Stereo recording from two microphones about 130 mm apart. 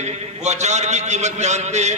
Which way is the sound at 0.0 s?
55° right (ahead or behind).